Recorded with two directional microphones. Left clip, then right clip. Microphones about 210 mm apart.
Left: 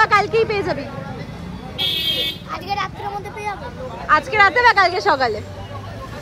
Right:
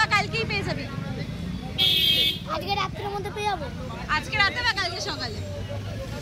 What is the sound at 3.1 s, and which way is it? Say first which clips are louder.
Speech: left 1 dB; 10° right (ahead or behind).